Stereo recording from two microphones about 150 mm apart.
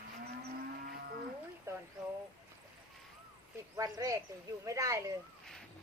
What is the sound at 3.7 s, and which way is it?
A man's voice, 25° right (ahead or behind).